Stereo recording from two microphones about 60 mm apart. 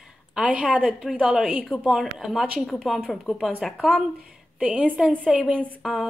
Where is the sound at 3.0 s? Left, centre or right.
Centre.